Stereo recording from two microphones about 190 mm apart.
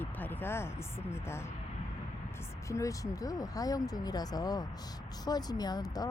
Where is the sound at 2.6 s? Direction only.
15° left (ahead or behind).